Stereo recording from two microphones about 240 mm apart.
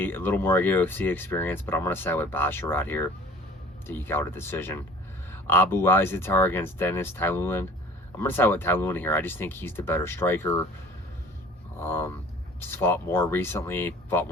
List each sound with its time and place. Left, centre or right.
0.0 s speech: centre
11.8 s speech: centre